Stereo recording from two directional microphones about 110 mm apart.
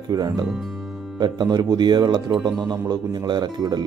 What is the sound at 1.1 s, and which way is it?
Speech, 40° right (ahead or behind).